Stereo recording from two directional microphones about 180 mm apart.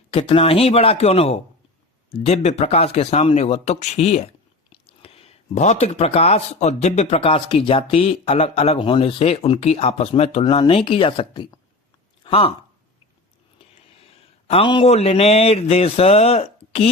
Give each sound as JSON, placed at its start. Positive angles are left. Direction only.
{"t": 0.1, "sound": "speech", "side_deg": 30}
{"t": 14.0, "sound": "speech", "side_deg": 30}